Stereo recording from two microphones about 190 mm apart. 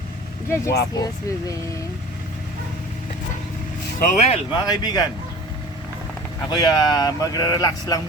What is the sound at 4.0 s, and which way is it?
Speech, 35° left (ahead or behind).